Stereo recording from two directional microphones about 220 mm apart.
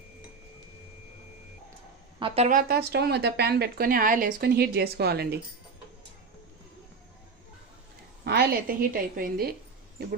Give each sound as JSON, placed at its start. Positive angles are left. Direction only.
{"t": 2.1, "sound": "speech", "side_deg": -25}
{"t": 8.2, "sound": "speech", "side_deg": -45}